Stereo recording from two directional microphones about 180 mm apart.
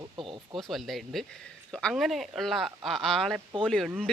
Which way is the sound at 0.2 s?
25° right (ahead or behind).